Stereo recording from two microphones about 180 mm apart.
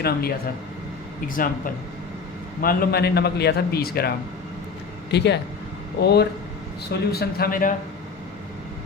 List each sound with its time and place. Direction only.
0.0 s a man's voice: 55° left (ahead or behind)
5.1 s a man's voice: 70° left (ahead or behind); by 7.7 s 55° left (ahead or behind)